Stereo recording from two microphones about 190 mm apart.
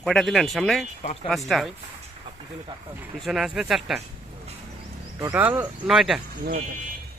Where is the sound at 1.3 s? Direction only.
Centre (ahead or behind).